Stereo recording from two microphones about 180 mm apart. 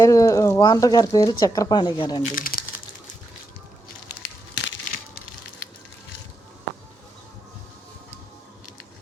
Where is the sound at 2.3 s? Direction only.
50° left (ahead or behind).